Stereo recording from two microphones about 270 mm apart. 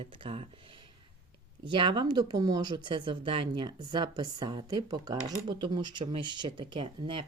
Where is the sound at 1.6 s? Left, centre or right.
Centre.